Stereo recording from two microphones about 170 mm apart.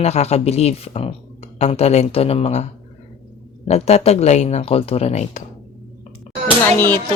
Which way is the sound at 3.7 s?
35° left (ahead or behind).